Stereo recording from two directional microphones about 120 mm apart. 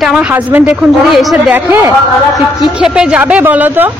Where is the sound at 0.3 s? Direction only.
15° right (ahead or behind).